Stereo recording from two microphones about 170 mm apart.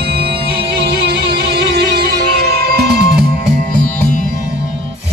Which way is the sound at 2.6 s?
75° right (ahead or behind).